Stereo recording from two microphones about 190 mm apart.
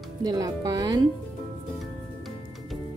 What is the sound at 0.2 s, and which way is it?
Speech, 20° right (ahead or behind).